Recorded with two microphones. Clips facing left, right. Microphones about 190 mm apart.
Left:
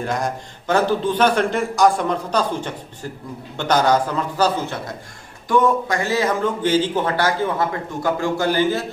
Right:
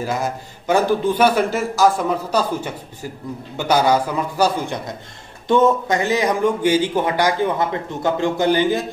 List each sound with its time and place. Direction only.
0.0 s a man's voice: 5° right (ahead or behind)